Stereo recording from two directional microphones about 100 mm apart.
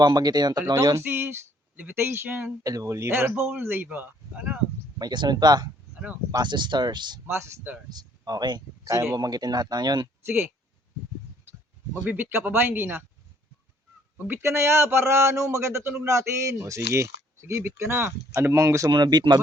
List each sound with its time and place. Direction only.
0.0 s speech: 45° right (ahead or behind)
1.1 s speech: 20° right (ahead or behind)
2.6 s a man's voice: 35° right (ahead or behind); by 4.6 s 15° right (ahead or behind)
4.9 s speech: 45° right (ahead or behind)
5.9 s a sound: 10° right (ahead or behind)
6.4 s speech: 50° right (ahead or behind)
7.3 s a man's voice: 25° right (ahead or behind)
7.9 s speech: 40° right (ahead or behind)
12.0 s a man's voice: 20° right (ahead or behind)
14.3 s a man's voice: 25° right (ahead or behind)
18.9 s speech: 45° right (ahead or behind)